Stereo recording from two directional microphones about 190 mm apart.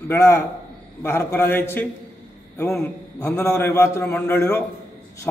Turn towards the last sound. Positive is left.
turn(degrees=15)  # may be behind; listen again after turning